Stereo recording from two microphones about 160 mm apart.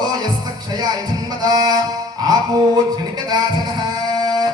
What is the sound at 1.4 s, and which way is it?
Music, 25° right (ahead or behind).